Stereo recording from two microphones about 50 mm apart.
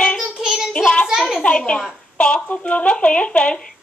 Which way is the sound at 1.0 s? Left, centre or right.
Centre.